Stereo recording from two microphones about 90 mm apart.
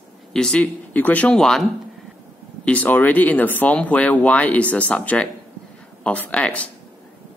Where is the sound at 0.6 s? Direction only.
20° left (ahead or behind).